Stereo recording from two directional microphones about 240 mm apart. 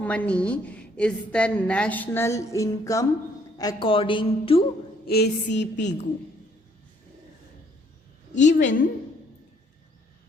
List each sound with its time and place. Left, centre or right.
0.0 s a woman's voice: centre; by 4.6 s left
5.0 s a woman's voice: left
8.4 s a woman's voice: left